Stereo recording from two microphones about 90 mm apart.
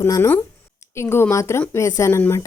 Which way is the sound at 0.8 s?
30° left (ahead or behind).